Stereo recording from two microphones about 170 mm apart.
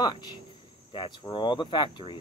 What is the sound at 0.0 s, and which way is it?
Speech, 25° left (ahead or behind).